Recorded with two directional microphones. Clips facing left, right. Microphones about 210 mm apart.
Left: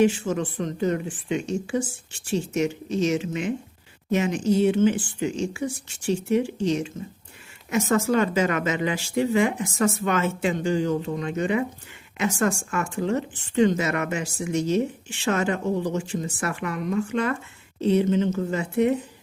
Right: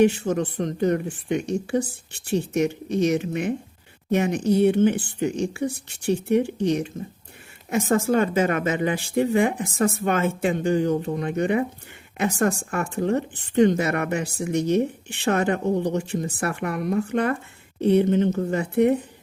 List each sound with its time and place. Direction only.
0.0 s speech: 60° right (ahead or behind)